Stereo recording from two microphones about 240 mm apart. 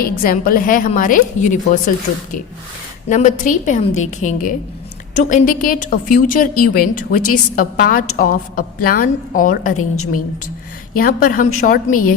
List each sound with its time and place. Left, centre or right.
0.0 s a woman's voice: left
3.1 s a woman's voice: left
9.7 s a woman's voice: left
10.9 s a woman's voice: left